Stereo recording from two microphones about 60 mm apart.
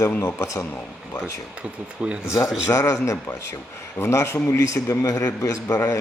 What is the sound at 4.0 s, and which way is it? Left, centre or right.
Speech, left.